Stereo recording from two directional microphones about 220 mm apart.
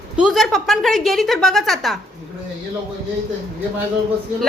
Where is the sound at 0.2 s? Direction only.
Centre (ahead or behind).